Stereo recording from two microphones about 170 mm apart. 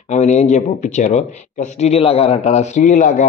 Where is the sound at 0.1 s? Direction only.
45° left (ahead or behind).